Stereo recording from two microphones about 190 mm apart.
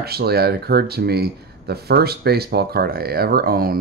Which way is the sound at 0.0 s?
55° right (ahead or behind).